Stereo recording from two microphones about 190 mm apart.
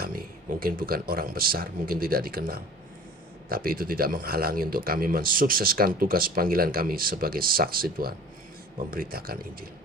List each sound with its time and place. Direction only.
0.0 s speech: 50° right (ahead or behind)